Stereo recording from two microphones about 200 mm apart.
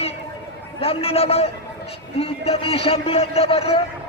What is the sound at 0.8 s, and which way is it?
A man's voice, 30° left (ahead or behind).